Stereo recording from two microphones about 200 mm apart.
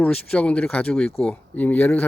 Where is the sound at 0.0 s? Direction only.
5° left (ahead or behind).